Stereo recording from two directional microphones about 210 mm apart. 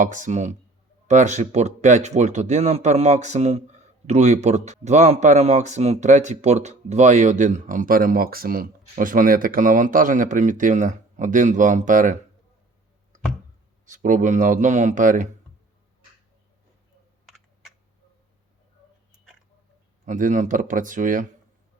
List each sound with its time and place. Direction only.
0.0 s speech: 35° right (ahead or behind)
13.8 s speech: 35° right (ahead or behind)
20.1 s speech: 40° right (ahead or behind)